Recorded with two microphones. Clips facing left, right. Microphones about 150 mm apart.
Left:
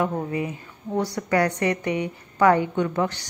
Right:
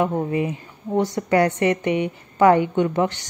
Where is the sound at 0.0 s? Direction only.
20° right (ahead or behind).